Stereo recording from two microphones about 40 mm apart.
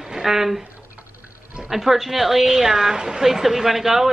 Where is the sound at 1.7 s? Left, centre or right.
Centre.